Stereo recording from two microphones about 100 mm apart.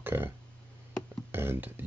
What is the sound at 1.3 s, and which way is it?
Speech, 20° right (ahead or behind).